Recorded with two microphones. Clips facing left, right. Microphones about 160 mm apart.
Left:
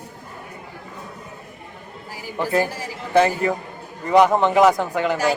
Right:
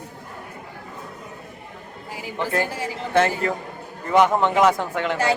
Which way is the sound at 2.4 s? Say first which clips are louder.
Left 3 dB; 10° left (ahead or behind).